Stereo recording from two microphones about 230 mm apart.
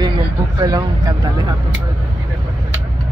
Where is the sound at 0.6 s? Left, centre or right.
Centre.